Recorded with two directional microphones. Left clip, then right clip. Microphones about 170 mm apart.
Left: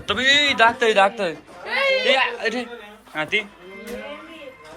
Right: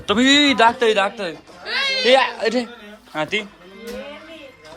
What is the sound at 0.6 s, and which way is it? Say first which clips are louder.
Speech: right 2 dB; 25° right (ahead or behind).